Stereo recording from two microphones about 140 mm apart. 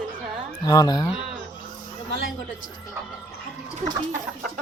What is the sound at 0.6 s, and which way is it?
Speech, 30° left (ahead or behind).